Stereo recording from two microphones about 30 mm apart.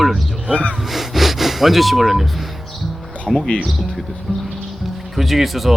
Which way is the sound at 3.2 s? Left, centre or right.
Centre.